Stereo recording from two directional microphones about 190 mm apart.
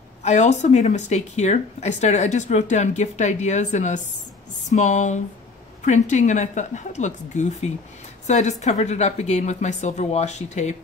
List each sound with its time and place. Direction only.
0.2 s speech: 35° left (ahead or behind)